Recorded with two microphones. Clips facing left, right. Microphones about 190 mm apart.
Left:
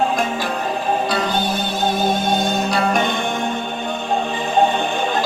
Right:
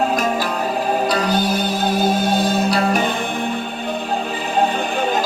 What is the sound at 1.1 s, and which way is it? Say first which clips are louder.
Music: right 2 dB; 35° right (ahead or behind).